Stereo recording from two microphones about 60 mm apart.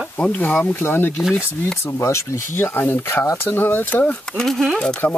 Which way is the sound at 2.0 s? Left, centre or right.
Left.